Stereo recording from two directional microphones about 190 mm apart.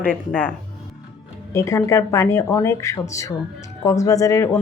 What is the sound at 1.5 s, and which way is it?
Speech, 15° left (ahead or behind).